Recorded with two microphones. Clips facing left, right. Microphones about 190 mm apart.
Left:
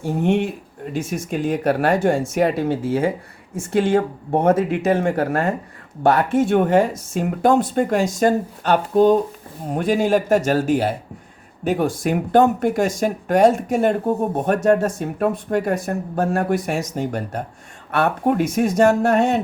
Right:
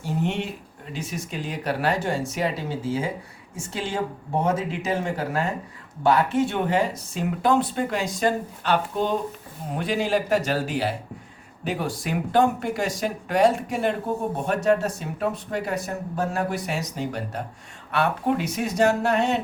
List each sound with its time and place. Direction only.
0.0 s speech: 55° left (ahead or behind)